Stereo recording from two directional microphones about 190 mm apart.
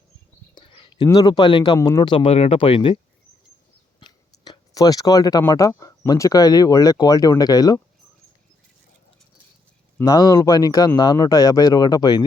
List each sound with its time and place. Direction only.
0.5 s a sound: 25° left (ahead or behind)
1.0 s speech: 20° left (ahead or behind)
4.0 s speech: 20° left (ahead or behind)
10.0 s speech: 20° left (ahead or behind)